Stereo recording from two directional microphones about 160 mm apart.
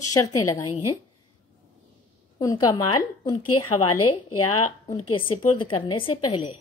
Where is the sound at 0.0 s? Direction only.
20° left (ahead or behind).